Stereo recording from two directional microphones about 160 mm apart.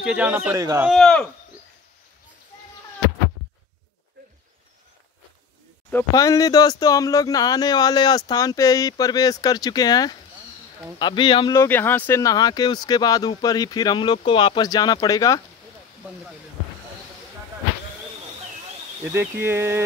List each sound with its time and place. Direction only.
0.0 s speech: 10° right (ahead or behind)
0.6 s speech: 20° right (ahead or behind)
0.8 s speech: 5° left (ahead or behind)
6.1 s speech: 20° left (ahead or behind)
11.5 s speech: 15° left (ahead or behind)
19.1 s speech: 15° right (ahead or behind)